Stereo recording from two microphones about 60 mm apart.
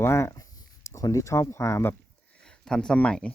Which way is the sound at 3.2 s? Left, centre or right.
Centre.